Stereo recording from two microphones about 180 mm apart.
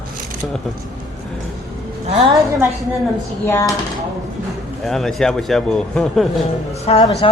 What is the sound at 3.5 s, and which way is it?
Speech, 20° left (ahead or behind).